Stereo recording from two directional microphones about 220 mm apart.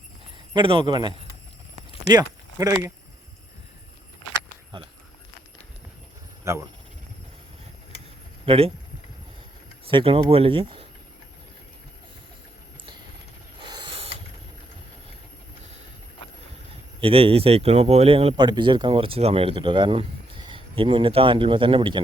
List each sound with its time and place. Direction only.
0.5 s speech: 25° right (ahead or behind)
6.4 s speech: 10° right (ahead or behind)
8.4 s speech: 25° right (ahead or behind)
9.9 s speech: 25° right (ahead or behind)
13.6 s a sound: 20° right (ahead or behind)
17.0 s speech: 25° right (ahead or behind)